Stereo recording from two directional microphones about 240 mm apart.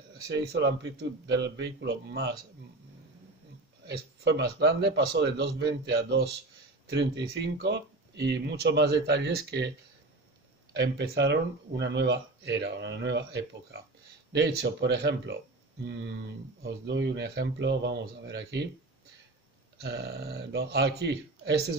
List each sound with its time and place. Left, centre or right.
0.5 s speech: right
3.8 s speech: right
10.7 s speech: right
16.8 s speech: right
19.8 s speech: right